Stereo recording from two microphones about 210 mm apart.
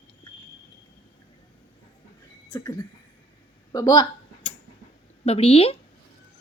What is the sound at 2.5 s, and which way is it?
A woman's voice, 15° left (ahead or behind).